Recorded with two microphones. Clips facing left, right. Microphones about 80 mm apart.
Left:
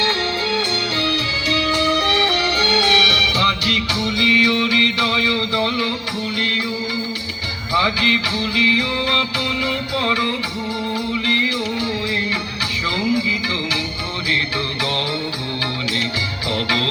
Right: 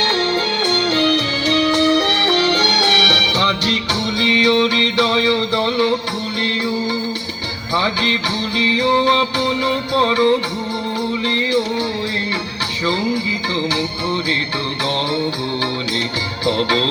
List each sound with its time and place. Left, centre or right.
0.9 s music: right
3.4 s music: right
7.8 s music: right
11.3 s music: right
16.5 s music: right